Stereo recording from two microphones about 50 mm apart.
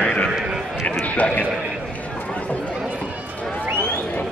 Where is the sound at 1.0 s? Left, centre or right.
Left.